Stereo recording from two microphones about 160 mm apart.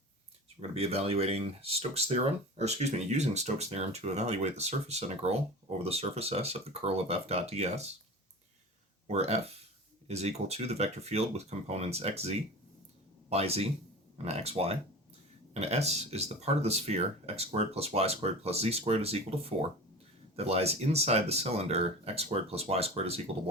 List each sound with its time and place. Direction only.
0.7 s speech: 40° right (ahead or behind)
9.0 s speech: 40° right (ahead or behind)